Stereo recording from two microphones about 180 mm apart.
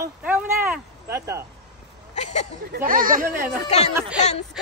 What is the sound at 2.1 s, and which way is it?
Speech, 40° left (ahead or behind).